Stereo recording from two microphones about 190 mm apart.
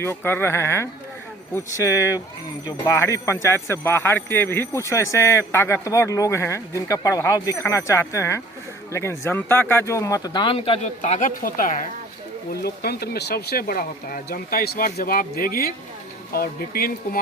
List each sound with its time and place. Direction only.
0.0 s speech: 10° left (ahead or behind); by 17.2 s 50° left (ahead or behind)